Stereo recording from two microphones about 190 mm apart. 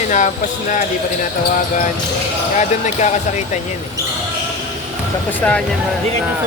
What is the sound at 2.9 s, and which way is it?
Speech, 35° left (ahead or behind).